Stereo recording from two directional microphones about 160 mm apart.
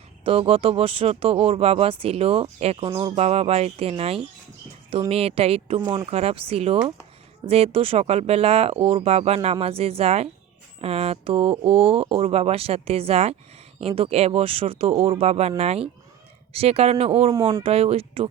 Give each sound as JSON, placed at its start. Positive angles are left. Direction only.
{"t": 0.3, "sound": "speech", "side_deg": -35}
{"t": 2.9, "sound": "speech", "side_deg": -25}
{"t": 3.2, "sound": "speech", "side_deg": -40}
{"t": 5.8, "sound": "speech", "side_deg": -25}
{"t": 6.1, "sound": "speech", "side_deg": -40}